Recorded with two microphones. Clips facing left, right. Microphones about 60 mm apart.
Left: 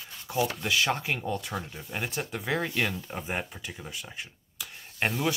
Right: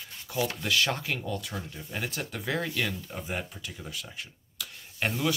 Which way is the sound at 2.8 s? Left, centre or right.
Left.